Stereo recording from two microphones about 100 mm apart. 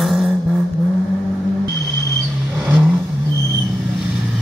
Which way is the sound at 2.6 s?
20° right (ahead or behind).